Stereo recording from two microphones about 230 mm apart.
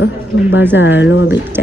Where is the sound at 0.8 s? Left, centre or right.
Left.